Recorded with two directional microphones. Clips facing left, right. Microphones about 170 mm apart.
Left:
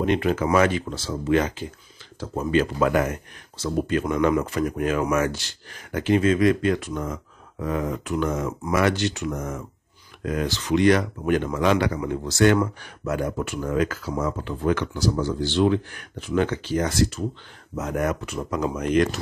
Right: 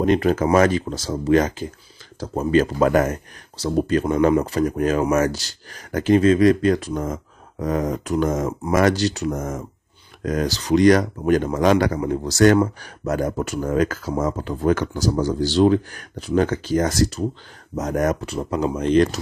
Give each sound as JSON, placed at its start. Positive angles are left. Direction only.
{"t": 0.0, "sound": "speech", "side_deg": -40}